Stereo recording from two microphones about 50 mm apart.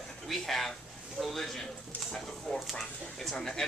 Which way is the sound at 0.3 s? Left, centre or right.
Centre.